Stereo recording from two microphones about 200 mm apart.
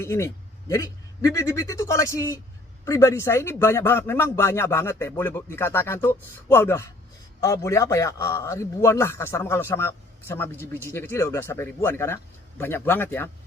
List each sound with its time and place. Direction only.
0.0 s a man's voice: 15° left (ahead or behind)